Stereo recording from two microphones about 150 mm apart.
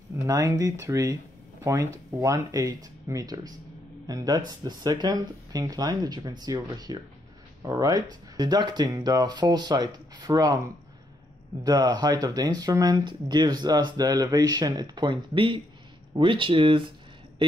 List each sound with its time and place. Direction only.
0.3 s speech: 20° right (ahead or behind)
11.6 s speech: 25° right (ahead or behind)